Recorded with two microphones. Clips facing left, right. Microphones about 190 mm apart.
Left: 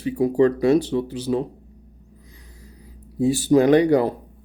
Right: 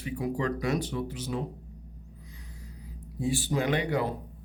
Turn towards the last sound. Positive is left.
turn(degrees=40)  # may be behind; listen again after turning